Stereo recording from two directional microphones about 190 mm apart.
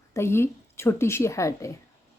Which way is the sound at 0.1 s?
15° left (ahead or behind).